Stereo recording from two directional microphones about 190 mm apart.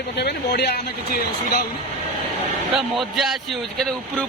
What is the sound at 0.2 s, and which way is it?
Speech, 60° left (ahead or behind).